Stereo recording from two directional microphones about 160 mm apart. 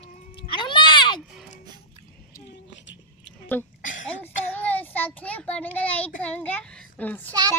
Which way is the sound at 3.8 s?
55° left (ahead or behind).